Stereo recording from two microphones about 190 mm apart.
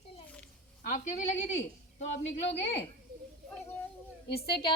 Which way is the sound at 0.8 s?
45° left (ahead or behind).